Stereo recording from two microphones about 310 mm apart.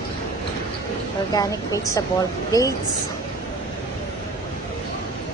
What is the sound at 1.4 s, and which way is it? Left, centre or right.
A woman's voice, centre.